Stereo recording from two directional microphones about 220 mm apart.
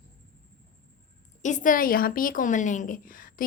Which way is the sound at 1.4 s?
35° left (ahead or behind).